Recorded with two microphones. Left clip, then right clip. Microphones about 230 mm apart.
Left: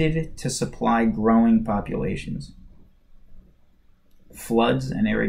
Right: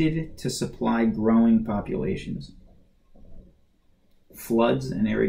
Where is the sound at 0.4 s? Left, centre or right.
Centre.